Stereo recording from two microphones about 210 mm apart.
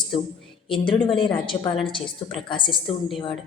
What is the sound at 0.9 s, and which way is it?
Speech, 25° left (ahead or behind).